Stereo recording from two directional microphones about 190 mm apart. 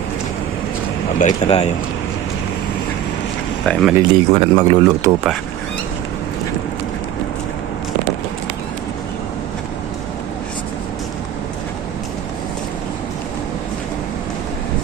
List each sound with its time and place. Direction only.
1.2 s speech: 35° left (ahead or behind)
3.7 s speech: centre (ahead or behind)
3.9 s a man's voice: 25° right (ahead or behind)